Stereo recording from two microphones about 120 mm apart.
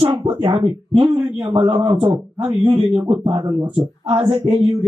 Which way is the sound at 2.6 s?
40° right (ahead or behind).